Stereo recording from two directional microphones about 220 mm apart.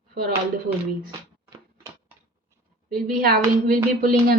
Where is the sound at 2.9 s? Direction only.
40° right (ahead or behind).